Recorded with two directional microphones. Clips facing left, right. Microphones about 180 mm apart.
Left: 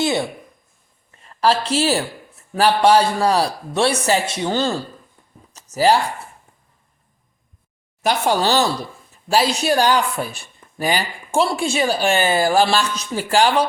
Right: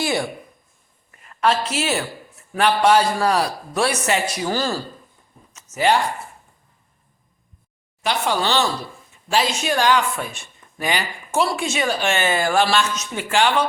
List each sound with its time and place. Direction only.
0.0 s a woman's voice: 20° left (ahead or behind)
5.5 s a sound: 35° left (ahead or behind)
8.0 s speech: 40° left (ahead or behind)